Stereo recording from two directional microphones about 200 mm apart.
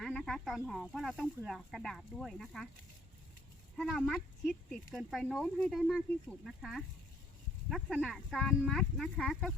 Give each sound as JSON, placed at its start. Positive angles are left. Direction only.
{"t": 0.0, "sound": "speech", "side_deg": 0}
{"t": 3.8, "sound": "speech", "side_deg": 0}